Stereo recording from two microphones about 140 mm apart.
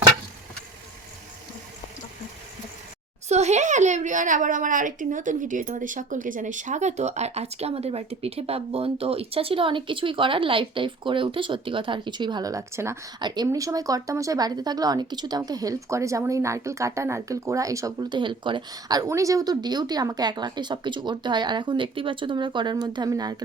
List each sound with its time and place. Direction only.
3.2 s speech: 55° right (ahead or behind); by 13.0 s 20° right (ahead or behind)
13.1 s speech: 30° right (ahead or behind)